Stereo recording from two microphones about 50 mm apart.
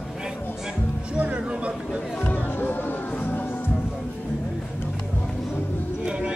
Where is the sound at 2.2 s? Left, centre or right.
Left.